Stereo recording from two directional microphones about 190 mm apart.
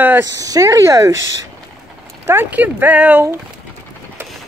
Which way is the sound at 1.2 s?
80° right.